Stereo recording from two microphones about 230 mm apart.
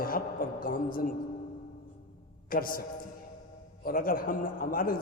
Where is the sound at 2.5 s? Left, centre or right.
Left.